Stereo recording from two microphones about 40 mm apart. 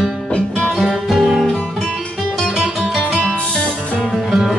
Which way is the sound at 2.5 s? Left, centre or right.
Centre.